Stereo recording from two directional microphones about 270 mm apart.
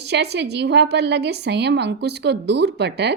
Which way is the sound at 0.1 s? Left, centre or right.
Right.